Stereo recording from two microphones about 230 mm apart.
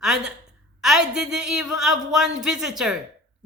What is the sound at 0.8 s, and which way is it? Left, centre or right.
A man's voice, centre.